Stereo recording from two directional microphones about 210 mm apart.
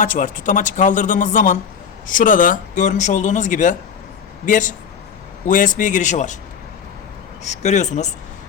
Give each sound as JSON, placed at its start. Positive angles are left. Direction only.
{"t": 0.0, "sound": "speech", "side_deg": 40}
{"t": 7.4, "sound": "speech", "side_deg": 35}